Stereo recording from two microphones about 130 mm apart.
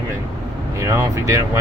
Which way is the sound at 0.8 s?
20° right (ahead or behind).